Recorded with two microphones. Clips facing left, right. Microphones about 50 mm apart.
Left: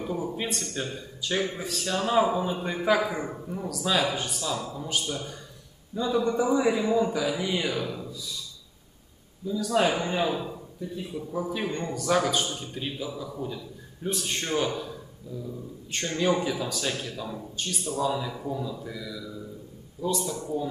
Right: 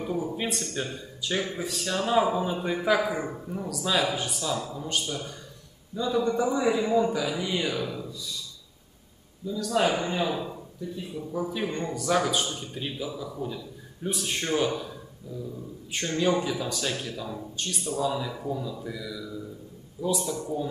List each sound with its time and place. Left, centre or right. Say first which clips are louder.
0.1 s speech: right 1 dB; centre
9.7 s speech: even; centre
16.1 s speech: even; centre